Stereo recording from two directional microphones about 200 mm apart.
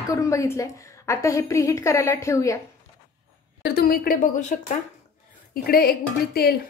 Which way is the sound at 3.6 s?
50° left (ahead or behind).